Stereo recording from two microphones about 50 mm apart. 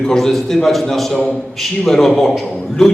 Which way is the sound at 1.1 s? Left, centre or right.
Left.